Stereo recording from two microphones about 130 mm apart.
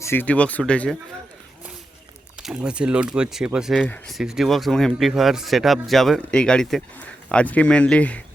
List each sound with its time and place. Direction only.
0.0 s speech: 15° left (ahead or behind)
2.4 s speech: 5° right (ahead or behind)
3.8 s speech: 15° left (ahead or behind)
4.1 s speech: 5° right (ahead or behind)